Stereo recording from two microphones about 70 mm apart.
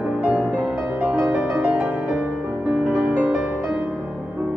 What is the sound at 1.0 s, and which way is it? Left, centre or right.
Music, centre.